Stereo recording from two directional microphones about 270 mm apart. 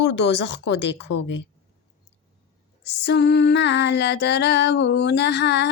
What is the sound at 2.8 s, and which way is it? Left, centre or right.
Female singing, left.